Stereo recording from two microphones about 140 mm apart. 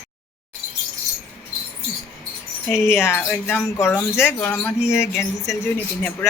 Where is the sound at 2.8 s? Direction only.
20° left (ahead or behind).